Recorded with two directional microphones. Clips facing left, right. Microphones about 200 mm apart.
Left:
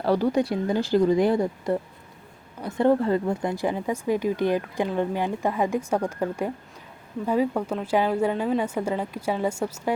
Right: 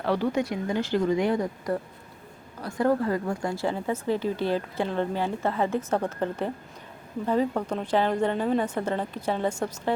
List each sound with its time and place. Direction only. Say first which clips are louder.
0.0 s speech: left 3 dB; 40° left (ahead or behind); by 9.9 s 10° left (ahead or behind)